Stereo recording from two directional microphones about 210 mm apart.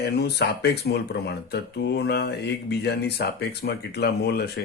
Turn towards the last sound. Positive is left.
turn(degrees=50)  # may be behind; listen again after turning